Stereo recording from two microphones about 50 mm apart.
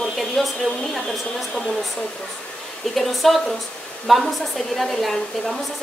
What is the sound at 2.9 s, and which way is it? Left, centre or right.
A woman's voice, centre.